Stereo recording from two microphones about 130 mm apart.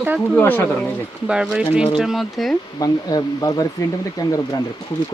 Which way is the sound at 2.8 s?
30° left (ahead or behind).